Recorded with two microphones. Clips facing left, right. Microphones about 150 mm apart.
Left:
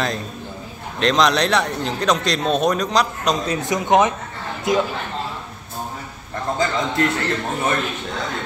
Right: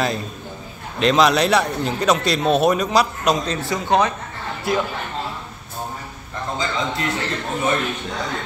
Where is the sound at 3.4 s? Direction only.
20° left (ahead or behind).